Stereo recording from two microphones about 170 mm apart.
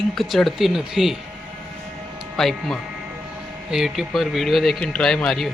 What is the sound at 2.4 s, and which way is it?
Speech, centre (ahead or behind).